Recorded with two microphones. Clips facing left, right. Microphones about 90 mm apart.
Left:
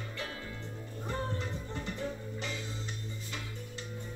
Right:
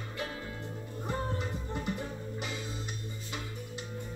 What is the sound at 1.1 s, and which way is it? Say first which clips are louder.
Music: right 2 dB; 15° right (ahead or behind).